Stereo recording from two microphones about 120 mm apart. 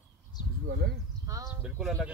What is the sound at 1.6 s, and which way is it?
Speech, 5° right (ahead or behind).